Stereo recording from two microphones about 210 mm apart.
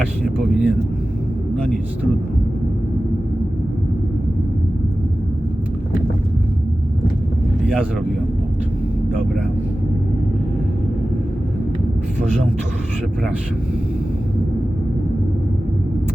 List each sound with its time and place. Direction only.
0.3 s speech: 5° right (ahead or behind)